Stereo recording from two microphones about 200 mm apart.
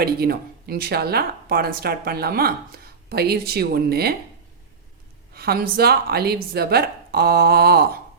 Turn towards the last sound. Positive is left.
turn(degrees=-50)  # may be behind; listen again after turning